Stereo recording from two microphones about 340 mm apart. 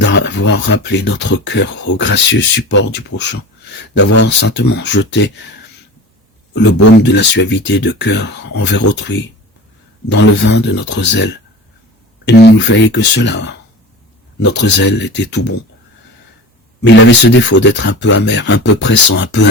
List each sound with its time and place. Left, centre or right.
0.0 s speech: left
7.0 s speech: left
10.1 s speech: left
16.8 s speech: left